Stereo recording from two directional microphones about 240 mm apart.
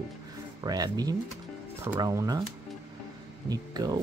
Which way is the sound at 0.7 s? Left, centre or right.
Centre.